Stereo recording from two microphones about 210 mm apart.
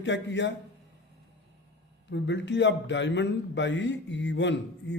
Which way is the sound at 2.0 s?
60° left (ahead or behind).